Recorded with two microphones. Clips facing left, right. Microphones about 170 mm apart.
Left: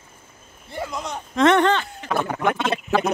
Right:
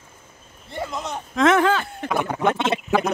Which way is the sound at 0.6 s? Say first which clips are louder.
Even; centre (ahead or behind).